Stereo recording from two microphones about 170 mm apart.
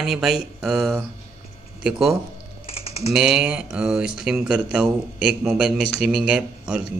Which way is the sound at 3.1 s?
5° right (ahead or behind).